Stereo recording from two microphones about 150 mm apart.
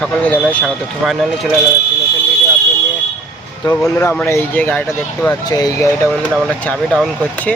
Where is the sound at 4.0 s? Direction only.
15° left (ahead or behind).